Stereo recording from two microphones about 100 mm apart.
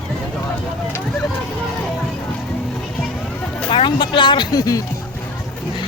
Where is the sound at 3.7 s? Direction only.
55° left (ahead or behind); by 4.8 s 40° left (ahead or behind).